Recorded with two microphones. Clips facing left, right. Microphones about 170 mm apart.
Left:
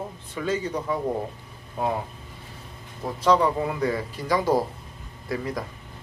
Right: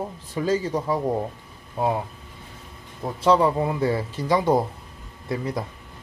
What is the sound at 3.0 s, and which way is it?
Speech, 25° right (ahead or behind).